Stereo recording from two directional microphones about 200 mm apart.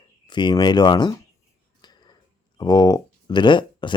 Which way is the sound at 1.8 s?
20° left (ahead or behind).